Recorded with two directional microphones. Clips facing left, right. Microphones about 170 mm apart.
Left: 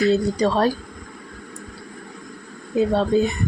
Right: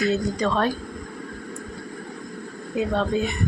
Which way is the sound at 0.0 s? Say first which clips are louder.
Left 4 dB; 35° left (ahead or behind).